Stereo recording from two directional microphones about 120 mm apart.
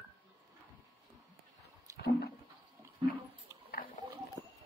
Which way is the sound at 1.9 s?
25° right (ahead or behind).